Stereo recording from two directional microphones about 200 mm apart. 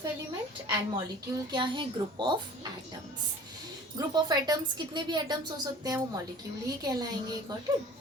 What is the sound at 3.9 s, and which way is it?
A woman's voice, 20° right (ahead or behind).